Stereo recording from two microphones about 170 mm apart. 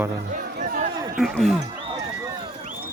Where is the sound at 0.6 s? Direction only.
50° right (ahead or behind).